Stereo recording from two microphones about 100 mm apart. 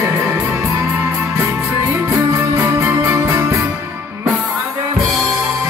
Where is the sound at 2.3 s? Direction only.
25° right (ahead or behind).